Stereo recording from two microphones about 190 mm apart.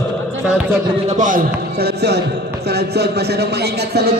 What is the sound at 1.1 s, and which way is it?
Speech, 40° right (ahead or behind).